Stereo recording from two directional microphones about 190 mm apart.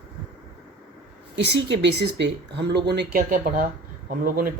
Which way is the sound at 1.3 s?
65° right (ahead or behind).